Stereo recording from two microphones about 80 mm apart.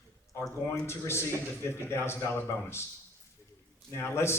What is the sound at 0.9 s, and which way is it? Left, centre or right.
A man's voice, left.